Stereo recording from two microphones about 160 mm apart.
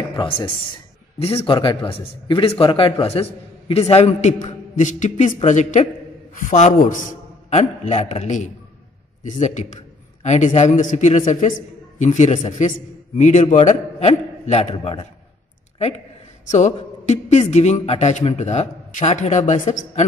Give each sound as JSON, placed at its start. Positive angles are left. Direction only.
{"t": 0.1, "sound": "a man's voice", "side_deg": 30}
{"t": 16.4, "sound": "a man's voice", "side_deg": 45}